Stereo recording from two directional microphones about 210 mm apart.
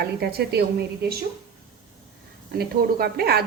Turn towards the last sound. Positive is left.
turn(degrees=-50)  # may be behind; listen again after turning